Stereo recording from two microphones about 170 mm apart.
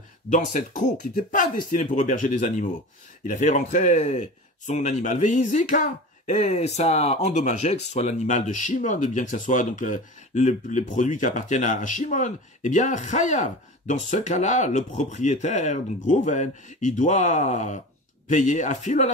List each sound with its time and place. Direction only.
0.3 s speech: 45° left (ahead or behind)